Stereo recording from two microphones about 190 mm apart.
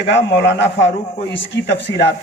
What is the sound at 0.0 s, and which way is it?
A man's voice, 70° left (ahead or behind).